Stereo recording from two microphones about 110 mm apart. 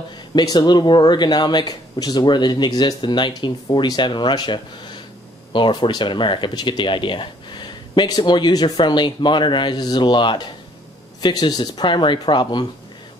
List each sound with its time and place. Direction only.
0.3 s speech: 40° left (ahead or behind)